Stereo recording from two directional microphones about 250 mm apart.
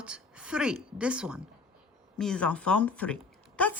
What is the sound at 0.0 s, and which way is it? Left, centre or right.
A woman's voice, centre.